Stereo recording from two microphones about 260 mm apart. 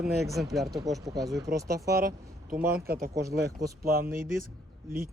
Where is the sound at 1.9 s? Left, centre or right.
Right.